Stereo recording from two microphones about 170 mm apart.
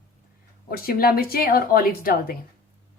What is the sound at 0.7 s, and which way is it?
Speech, 60° left (ahead or behind).